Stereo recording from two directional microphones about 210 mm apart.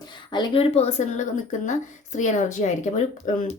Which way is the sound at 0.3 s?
25° left (ahead or behind).